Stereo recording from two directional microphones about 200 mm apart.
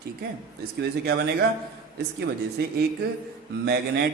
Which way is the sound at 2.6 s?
55° right (ahead or behind).